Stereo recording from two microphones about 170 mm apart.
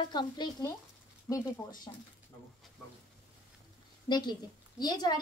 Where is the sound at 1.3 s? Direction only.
Centre (ahead or behind).